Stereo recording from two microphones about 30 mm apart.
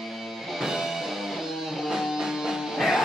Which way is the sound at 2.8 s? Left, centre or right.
Centre.